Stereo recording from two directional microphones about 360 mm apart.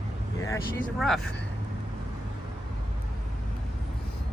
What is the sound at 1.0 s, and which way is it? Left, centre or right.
Speech, centre.